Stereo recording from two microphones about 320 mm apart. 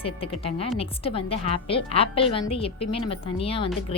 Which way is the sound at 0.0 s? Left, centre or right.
Centre.